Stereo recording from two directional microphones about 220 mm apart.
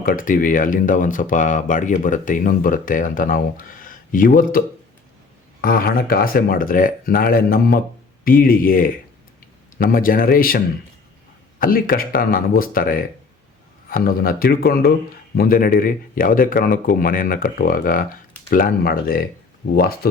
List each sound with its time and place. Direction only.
0.0 s speech: 40° left (ahead or behind)
5.6 s speech: 40° left (ahead or behind)
11.6 s speech: 40° left (ahead or behind)